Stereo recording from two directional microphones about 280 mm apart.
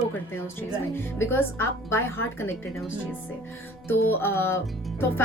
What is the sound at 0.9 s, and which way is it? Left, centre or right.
Speech, centre.